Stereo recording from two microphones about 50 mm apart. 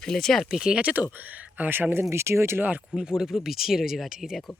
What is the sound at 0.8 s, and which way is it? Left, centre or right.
Speech, right.